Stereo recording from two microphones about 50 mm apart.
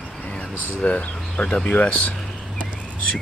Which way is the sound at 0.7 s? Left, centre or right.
Left.